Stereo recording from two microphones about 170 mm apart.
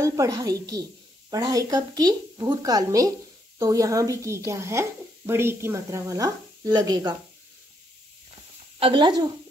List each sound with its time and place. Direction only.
0.0 s a woman's voice: 20° right (ahead or behind)
8.7 s speech: 30° right (ahead or behind)